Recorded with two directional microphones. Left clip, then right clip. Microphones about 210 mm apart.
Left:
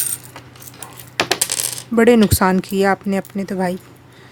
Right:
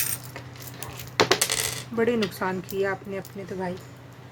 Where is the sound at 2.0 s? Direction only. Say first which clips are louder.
Left 12 dB; 50° left (ahead or behind).